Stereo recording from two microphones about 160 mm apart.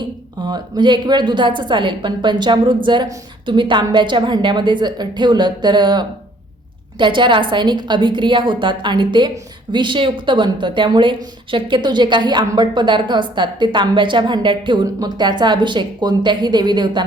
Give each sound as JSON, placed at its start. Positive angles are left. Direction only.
{"t": 0.4, "sound": "a woman's voice", "side_deg": -25}